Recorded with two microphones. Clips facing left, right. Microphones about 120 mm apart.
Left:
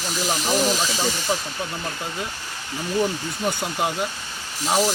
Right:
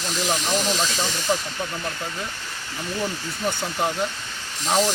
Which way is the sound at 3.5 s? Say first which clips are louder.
Even; 10° left (ahead or behind).